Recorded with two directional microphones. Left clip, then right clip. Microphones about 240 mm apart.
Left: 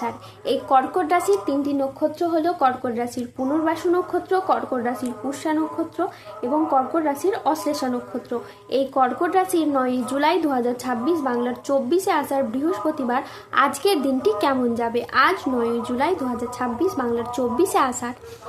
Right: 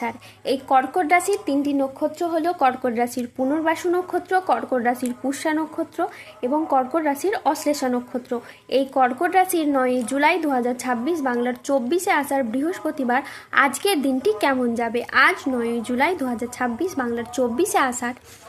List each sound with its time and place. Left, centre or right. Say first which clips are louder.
0.0 s a woman's voice: even; right